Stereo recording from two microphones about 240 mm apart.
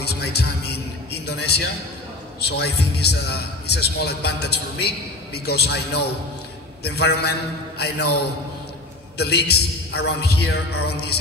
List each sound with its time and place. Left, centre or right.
0.0 s a sound: left
2.4 s a man's voice: left
9.2 s a man's voice: left